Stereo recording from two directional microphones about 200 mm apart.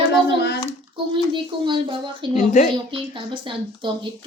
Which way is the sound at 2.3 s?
35° left (ahead or behind).